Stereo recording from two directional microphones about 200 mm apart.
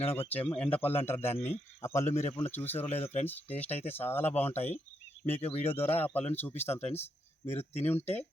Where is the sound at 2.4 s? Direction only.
10° left (ahead or behind).